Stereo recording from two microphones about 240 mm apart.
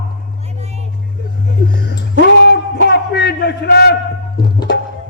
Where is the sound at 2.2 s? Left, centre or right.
Left.